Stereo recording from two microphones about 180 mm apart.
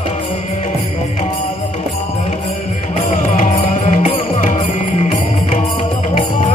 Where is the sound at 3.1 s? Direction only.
45° left (ahead or behind).